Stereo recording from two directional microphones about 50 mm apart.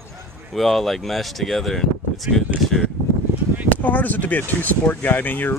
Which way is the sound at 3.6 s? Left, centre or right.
Left.